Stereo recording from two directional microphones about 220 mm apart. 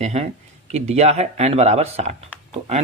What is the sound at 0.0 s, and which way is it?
A man's voice, 30° right (ahead or behind).